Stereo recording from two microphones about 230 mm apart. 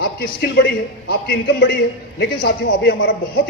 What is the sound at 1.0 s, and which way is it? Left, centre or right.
A man's voice, left.